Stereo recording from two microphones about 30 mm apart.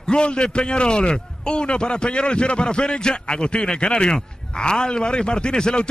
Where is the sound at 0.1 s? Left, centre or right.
Left.